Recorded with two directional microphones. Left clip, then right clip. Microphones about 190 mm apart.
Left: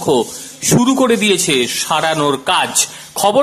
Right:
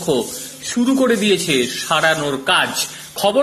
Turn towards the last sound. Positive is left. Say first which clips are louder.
# left 3 dB
turn(degrees=25)  # may be behind; listen again after turning